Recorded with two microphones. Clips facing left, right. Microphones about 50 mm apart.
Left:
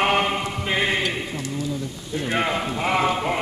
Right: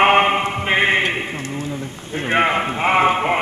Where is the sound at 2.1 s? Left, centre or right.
Right.